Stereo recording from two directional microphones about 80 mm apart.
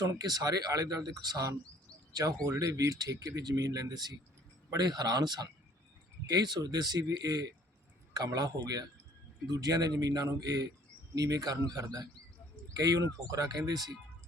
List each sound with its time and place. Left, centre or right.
0.0 s speech: right